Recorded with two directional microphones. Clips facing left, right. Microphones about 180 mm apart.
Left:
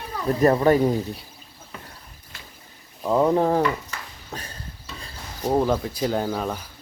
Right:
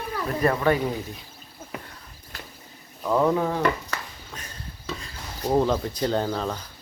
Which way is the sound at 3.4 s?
40° left (ahead or behind).